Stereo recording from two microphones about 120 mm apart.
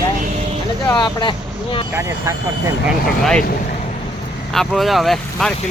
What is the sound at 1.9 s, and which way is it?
Speech, 25° right (ahead or behind).